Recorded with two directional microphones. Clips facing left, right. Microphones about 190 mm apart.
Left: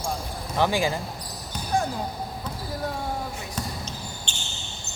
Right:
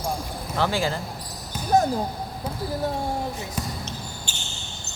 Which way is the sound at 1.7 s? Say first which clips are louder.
Right 6 dB; 40° right (ahead or behind).